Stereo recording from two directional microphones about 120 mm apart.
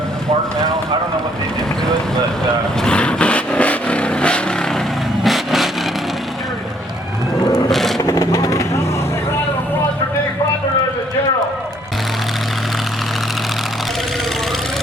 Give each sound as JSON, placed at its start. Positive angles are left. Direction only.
{"t": 2.8, "sound": "vehicle", "side_deg": 10}
{"t": 5.2, "sound": "a sound", "side_deg": 0}
{"t": 7.7, "sound": "vehicle", "side_deg": 0}
{"t": 8.0, "sound": "vehicle", "side_deg": 30}